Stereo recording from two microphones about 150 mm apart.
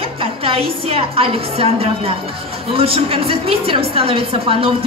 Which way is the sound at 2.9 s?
40° right (ahead or behind).